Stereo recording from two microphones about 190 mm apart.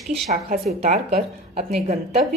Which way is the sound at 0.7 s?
35° right (ahead or behind).